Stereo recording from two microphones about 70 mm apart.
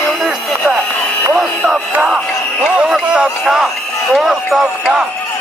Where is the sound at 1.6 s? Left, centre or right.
Right.